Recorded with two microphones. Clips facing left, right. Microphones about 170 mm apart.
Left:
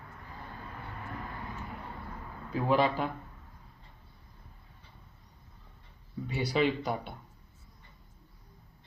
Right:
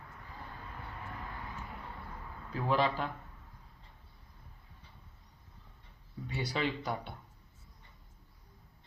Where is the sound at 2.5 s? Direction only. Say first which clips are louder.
Left 4 dB; 10° left (ahead or behind).